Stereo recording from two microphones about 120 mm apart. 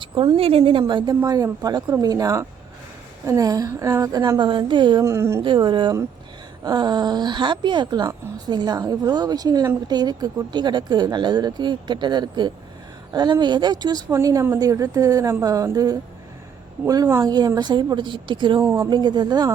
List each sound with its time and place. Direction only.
0.0 s a woman's voice: 45° right (ahead or behind)
1.2 s a woman's voice: 30° right (ahead or behind)
5.0 s a woman's voice: 25° right (ahead or behind)
5.4 s a woman's voice: 40° right (ahead or behind)
18.6 s a woman's voice: 25° right (ahead or behind)
18.9 s speech: 35° right (ahead or behind)